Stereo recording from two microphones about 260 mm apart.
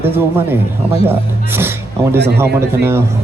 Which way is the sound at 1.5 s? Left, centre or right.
Centre.